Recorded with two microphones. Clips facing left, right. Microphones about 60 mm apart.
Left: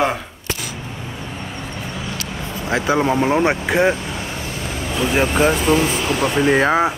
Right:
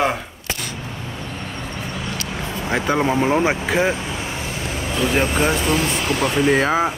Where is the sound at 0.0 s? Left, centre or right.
Centre.